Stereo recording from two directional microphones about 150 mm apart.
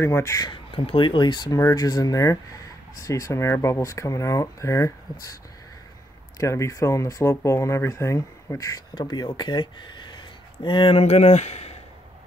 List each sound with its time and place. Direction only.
0.0 s speech: 20° left (ahead or behind)
6.3 s speech: 20° left (ahead or behind); by 11.7 s 45° left (ahead or behind)